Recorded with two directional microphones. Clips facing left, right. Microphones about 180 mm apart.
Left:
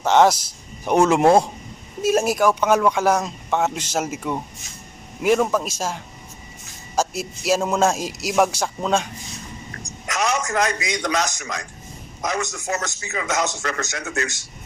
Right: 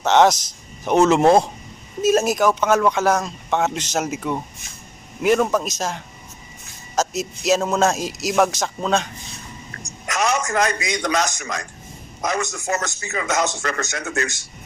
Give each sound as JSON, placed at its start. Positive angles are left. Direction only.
{"t": 0.0, "sound": "a man's voice", "side_deg": 10}
{"t": 5.2, "sound": "a man's voice", "side_deg": 0}
{"t": 10.1, "sound": "a man's voice", "side_deg": -50}